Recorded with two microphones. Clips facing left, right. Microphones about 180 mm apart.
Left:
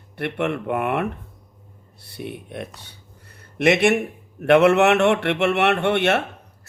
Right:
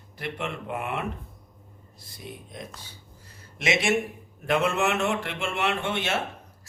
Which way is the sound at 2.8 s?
65° left (ahead or behind).